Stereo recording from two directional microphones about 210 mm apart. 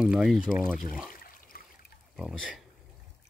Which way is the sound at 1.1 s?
40° left (ahead or behind).